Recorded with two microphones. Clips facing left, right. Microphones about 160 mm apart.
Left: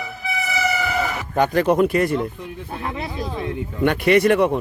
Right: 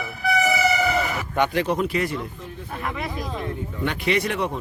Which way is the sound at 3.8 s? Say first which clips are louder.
Left 8 dB; 55° left (ahead or behind).